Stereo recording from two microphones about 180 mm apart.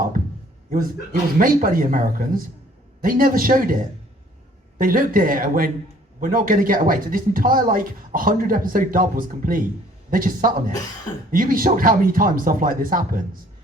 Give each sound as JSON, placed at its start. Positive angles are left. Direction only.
{"t": 1.4, "sound": "speech", "side_deg": -50}